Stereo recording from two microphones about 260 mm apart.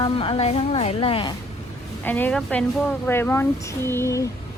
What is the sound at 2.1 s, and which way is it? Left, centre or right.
Speech, centre.